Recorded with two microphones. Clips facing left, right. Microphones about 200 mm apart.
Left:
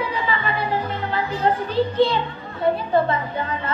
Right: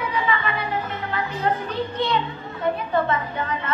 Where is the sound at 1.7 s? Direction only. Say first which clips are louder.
Left 6 dB; 30° left (ahead or behind).